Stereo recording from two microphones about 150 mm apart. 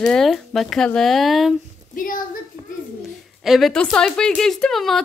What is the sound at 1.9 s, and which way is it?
Speech, 65° left (ahead or behind).